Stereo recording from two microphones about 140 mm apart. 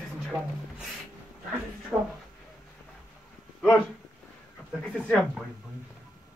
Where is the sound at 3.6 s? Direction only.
5° left (ahead or behind).